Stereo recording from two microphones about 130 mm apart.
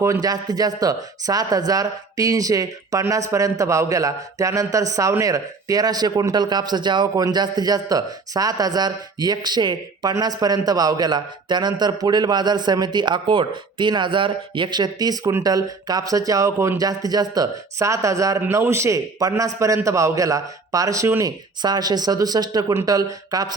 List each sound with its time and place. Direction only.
0.0 s speech: 25° right (ahead or behind)